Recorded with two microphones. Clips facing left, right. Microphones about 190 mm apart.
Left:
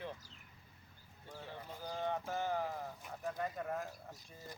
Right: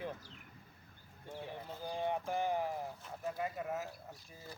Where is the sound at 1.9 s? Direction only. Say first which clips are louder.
Right 2 dB; 15° right (ahead or behind).